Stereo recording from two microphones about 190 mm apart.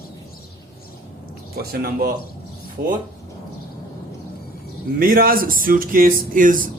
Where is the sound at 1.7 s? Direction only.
50° right (ahead or behind).